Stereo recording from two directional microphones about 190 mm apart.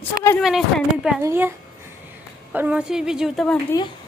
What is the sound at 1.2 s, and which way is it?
Speech, 10° right (ahead or behind).